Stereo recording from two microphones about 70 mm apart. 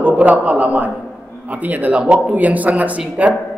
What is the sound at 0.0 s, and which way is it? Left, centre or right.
A man's voice, centre.